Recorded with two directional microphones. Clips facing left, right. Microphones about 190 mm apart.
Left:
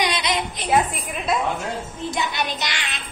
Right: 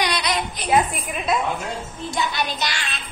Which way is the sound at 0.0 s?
20° left (ahead or behind).